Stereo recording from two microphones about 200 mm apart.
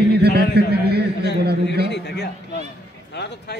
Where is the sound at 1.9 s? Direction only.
60° left (ahead or behind).